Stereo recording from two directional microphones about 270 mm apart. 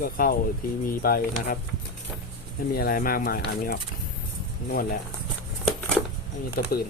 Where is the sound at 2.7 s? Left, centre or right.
Left.